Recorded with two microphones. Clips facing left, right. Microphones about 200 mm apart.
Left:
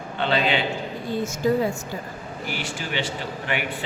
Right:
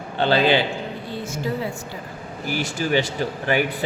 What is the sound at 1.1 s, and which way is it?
Speech, 45° left (ahead or behind).